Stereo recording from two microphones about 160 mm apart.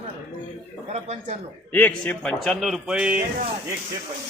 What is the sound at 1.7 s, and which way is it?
Speech, 10° left (ahead or behind).